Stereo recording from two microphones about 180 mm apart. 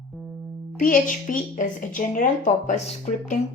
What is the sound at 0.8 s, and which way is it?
A woman's voice, 50° left (ahead or behind).